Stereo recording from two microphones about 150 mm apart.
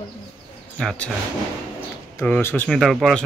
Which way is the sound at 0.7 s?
5° left (ahead or behind).